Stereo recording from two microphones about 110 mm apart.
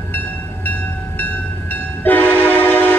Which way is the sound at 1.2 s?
15° left (ahead or behind).